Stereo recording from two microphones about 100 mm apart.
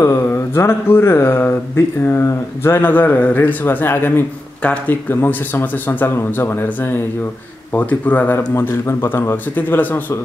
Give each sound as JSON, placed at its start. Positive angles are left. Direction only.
{"t": 0.0, "sound": "speech", "side_deg": 25}